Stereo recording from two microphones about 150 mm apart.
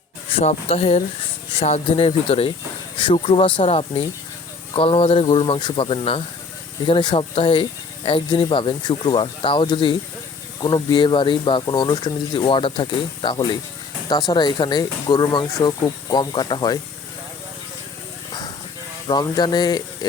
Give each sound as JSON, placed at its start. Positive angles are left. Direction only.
{"t": 0.3, "sound": "speech", "side_deg": 40}
{"t": 19.0, "sound": "speech", "side_deg": 30}